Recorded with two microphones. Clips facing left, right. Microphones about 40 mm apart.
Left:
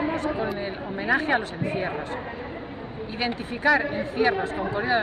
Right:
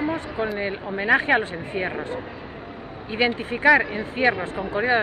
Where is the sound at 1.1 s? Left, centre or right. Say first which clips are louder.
Right 4 dB; right.